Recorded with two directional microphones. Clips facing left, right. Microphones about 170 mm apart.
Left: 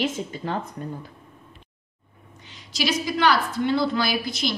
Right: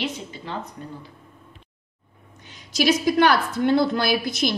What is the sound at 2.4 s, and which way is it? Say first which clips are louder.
A woman's voice: right 6 dB; 50° right (ahead or behind).